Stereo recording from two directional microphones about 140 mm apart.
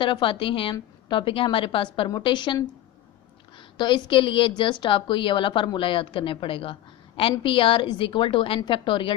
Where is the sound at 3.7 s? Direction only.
35° left (ahead or behind).